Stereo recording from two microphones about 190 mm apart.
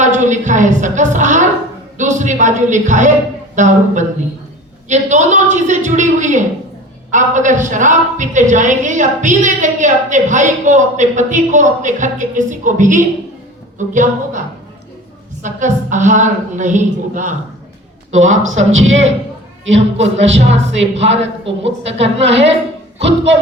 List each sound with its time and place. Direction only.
0.0 s a woman's voice: 40° right (ahead or behind)
15.4 s a woman's voice: 40° right (ahead or behind)
18.1 s speech: 90° right
19.7 s a woman's voice: 35° right (ahead or behind)
20.2 s speech: 75° right (ahead or behind)
20.9 s a woman's voice: 35° right (ahead or behind)
21.6 s speech: 70° right (ahead or behind)